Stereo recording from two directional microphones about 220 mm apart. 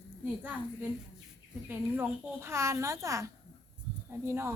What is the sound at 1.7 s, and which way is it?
A woman's voice, 10° right (ahead or behind).